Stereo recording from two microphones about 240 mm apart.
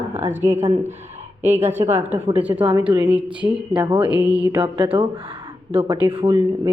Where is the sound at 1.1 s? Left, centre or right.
Right.